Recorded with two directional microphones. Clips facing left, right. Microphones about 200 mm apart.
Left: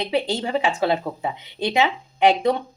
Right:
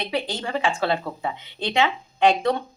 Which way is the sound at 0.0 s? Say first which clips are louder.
Left 4 dB; 25° left (ahead or behind).